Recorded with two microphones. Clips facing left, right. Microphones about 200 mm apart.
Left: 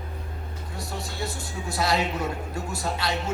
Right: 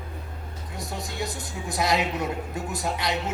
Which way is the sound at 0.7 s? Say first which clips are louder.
Right 2 dB; 20° right (ahead or behind).